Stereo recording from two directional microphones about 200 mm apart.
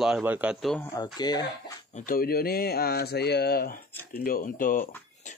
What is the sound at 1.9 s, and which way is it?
Speech, 45° left (ahead or behind).